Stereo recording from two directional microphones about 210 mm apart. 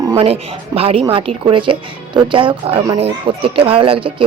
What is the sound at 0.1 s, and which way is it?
A woman's voice, 25° right (ahead or behind).